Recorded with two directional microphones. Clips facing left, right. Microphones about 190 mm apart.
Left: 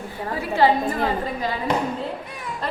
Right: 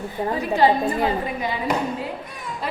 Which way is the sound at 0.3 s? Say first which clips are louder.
Even; 15° right (ahead or behind).